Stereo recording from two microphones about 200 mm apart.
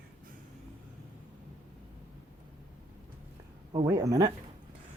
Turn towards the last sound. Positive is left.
turn(degrees=-15)  # may be behind; listen again after turning